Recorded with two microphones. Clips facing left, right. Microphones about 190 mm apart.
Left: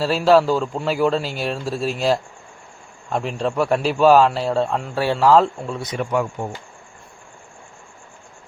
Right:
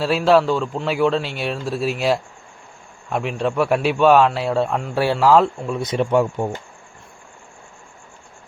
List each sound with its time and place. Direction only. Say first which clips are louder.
0.0 s a man's voice: even; centre (ahead or behind)
5.8 s speech: right 5 dB; 25° right (ahead or behind)